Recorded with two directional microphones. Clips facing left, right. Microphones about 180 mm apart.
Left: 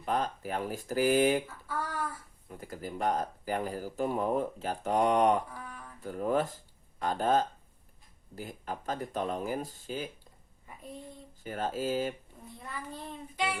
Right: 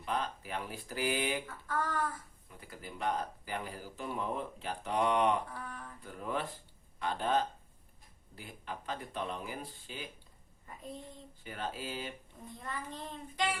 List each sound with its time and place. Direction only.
0.0 s speech: 45° left (ahead or behind)
1.5 s a child's voice: 10° left (ahead or behind)
2.5 s speech: 45° left (ahead or behind)
5.5 s a child's voice: 10° left (ahead or behind)
6.0 s speech: 45° left (ahead or behind)
11.4 s speech: 45° left (ahead or behind)
12.5 s a child's voice: 10° left (ahead or behind)